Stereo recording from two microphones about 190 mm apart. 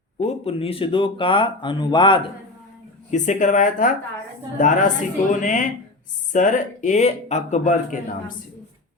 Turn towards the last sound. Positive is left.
turn(degrees=40)  # may be behind; listen again after turning